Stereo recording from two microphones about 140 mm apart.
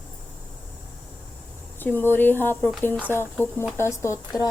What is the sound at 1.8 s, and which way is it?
Speech, 15° left (ahead or behind).